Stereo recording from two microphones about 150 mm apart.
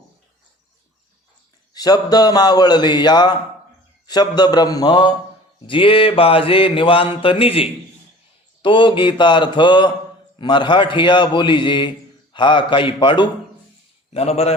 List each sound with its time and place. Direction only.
1.7 s speech: 25° left (ahead or behind)
5.6 s mantra: 35° left (ahead or behind)
14.1 s a man's voice: 45° left (ahead or behind)